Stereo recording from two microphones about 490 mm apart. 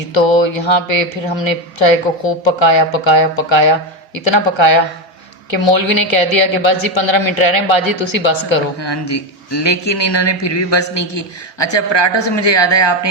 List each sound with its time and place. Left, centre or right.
0.1 s a woman's voice: left